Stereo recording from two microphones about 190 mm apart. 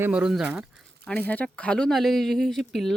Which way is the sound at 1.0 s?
5° left (ahead or behind).